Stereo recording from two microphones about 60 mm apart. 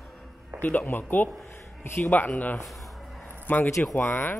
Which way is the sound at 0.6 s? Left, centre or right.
Left.